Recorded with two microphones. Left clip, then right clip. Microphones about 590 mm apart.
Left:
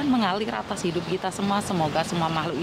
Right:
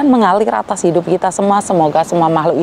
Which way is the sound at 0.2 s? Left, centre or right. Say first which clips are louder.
Right 14 dB; right.